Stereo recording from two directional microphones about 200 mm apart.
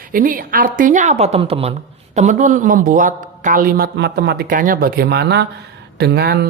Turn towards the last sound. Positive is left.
turn(degrees=-55)  # may be behind; listen again after turning